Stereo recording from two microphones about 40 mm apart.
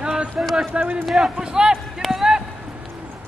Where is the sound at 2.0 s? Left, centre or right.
Centre.